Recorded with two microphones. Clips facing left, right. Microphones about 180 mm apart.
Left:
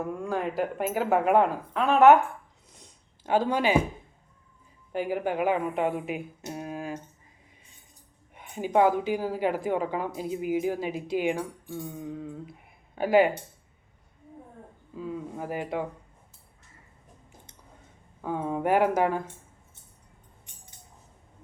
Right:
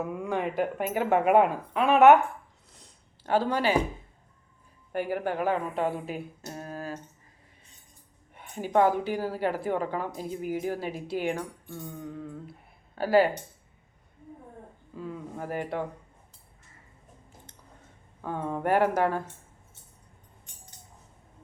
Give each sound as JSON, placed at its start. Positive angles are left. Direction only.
{"t": 0.0, "sound": "speech", "side_deg": -5}
{"t": 3.2, "sound": "a woman's voice", "side_deg": 15}
{"t": 4.9, "sound": "a woman's voice", "side_deg": 10}
{"t": 8.4, "sound": "a woman's voice", "side_deg": 10}
{"t": 14.9, "sound": "a woman's voice", "side_deg": 5}
{"t": 18.2, "sound": "a woman's voice", "side_deg": 10}